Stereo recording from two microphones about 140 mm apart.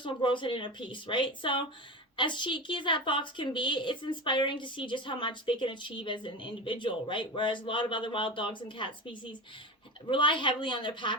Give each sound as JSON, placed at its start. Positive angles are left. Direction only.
{"t": 0.0, "sound": "a woman's voice", "side_deg": 35}